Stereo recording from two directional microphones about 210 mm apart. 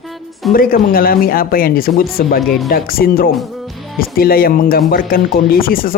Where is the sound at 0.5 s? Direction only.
45° left (ahead or behind).